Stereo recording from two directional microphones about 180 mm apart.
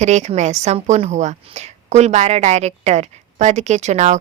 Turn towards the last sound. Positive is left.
turn(degrees=-40)  # may be behind; listen again after turning